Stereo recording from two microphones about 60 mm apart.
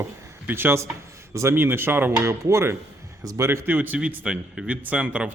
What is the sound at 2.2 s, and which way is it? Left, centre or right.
Speech, right.